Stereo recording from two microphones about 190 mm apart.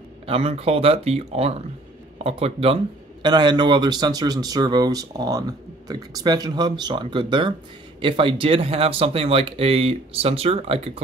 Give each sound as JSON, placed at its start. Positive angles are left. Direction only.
{"t": 0.3, "sound": "a man's voice", "side_deg": -30}